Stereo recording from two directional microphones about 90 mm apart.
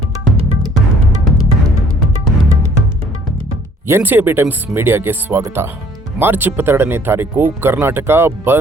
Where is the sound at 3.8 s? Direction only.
25° right (ahead or behind).